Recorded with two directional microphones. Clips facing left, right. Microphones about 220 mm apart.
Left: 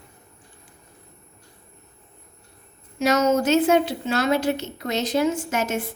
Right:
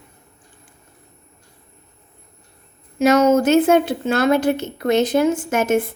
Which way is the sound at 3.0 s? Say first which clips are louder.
Right 6 dB; 55° right (ahead or behind).